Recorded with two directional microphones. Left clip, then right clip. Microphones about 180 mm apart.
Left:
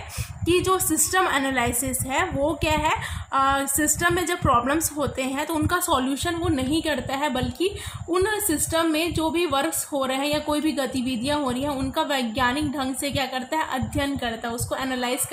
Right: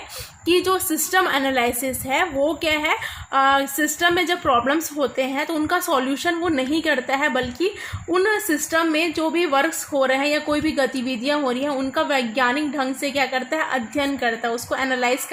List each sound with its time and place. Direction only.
0.6 s a woman's voice: 40° right (ahead or behind)